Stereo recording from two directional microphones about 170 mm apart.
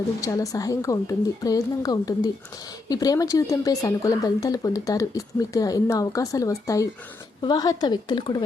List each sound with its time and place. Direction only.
0.2 s speech: 20° left (ahead or behind)